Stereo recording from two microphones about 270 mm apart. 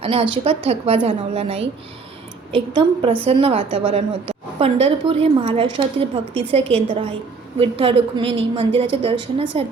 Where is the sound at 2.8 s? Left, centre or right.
Centre.